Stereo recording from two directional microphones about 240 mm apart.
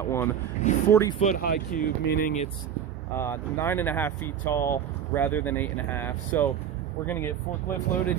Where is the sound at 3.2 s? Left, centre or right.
Centre.